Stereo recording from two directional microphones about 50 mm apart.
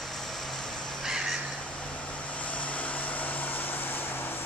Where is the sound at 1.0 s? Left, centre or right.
Centre.